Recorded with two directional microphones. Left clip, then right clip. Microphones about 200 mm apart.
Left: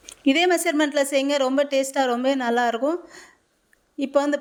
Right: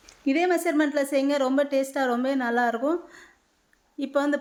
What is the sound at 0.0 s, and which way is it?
A woman's voice, 50° left (ahead or behind).